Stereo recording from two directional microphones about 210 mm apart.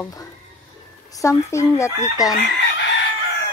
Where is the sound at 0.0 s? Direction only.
15° left (ahead or behind).